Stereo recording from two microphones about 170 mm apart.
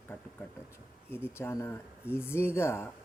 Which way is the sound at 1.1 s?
15° left (ahead or behind).